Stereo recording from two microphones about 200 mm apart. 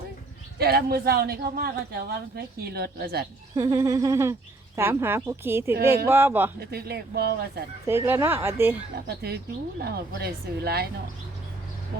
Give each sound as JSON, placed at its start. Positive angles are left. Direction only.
{"t": 0.6, "sound": "speech", "side_deg": -50}
{"t": 3.5, "sound": "speech", "side_deg": -15}
{"t": 6.6, "sound": "speech", "side_deg": -50}
{"t": 7.9, "sound": "speech", "side_deg": -10}
{"t": 9.0, "sound": "speech", "side_deg": -55}